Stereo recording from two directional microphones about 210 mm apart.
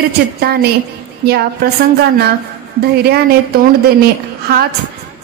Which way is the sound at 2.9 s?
50° right (ahead or behind).